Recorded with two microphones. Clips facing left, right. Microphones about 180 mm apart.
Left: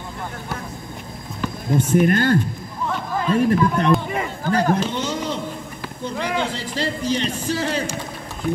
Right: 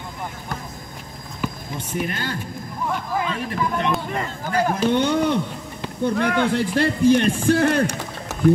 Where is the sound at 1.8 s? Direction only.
50° left (ahead or behind).